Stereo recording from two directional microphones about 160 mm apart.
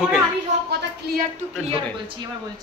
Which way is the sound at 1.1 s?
90° right.